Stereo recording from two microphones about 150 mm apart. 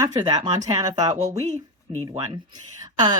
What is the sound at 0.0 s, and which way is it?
A woman's voice, 25° right (ahead or behind).